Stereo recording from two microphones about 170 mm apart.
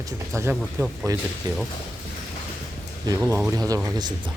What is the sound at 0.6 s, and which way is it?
Speech, centre (ahead or behind).